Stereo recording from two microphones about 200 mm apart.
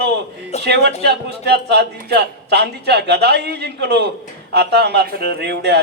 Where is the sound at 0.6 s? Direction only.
55° right (ahead or behind).